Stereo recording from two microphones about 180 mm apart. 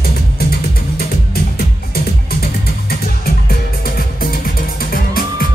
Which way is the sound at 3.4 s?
55° left (ahead or behind).